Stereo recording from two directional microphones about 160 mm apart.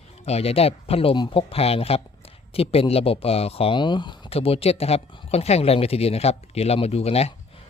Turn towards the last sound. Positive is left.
turn(degrees=40)  # may be behind; listen again after turning